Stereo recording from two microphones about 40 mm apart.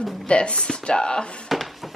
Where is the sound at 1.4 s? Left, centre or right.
Centre.